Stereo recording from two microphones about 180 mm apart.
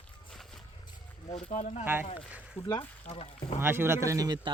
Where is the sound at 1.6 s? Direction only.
40° left (ahead or behind).